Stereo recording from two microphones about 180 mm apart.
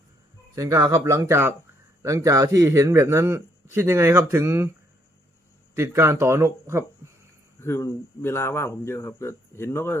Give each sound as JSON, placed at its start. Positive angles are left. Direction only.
{"t": 0.5, "sound": "speech", "side_deg": -15}
{"t": 5.7, "sound": "speech", "side_deg": -15}
{"t": 7.6, "sound": "speech", "side_deg": 15}